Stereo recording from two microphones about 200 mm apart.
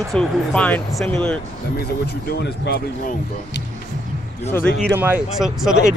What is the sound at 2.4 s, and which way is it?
Speech, 55° left (ahead or behind).